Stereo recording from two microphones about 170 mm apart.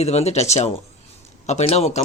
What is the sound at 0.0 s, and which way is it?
Speech, 40° left (ahead or behind).